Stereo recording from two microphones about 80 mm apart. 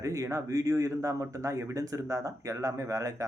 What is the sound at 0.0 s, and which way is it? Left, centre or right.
Speech, right.